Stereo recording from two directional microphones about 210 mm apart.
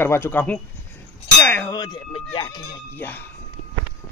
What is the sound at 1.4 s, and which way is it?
Clang, 10° left (ahead or behind).